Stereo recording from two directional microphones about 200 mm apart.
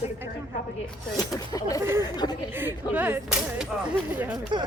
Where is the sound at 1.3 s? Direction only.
15° left (ahead or behind).